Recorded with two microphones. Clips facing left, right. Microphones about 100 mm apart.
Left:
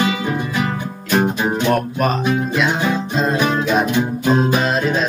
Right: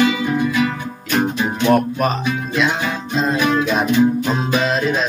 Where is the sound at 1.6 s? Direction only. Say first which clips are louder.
Right 4 dB; centre (ahead or behind).